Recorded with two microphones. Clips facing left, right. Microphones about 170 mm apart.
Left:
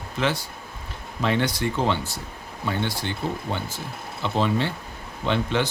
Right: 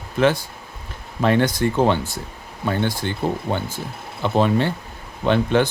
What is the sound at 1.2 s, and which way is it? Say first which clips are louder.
Speech: right 6 dB; 50° right (ahead or behind).